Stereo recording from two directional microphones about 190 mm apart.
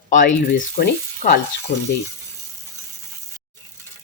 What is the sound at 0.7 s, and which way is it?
Speech, 50° left (ahead or behind).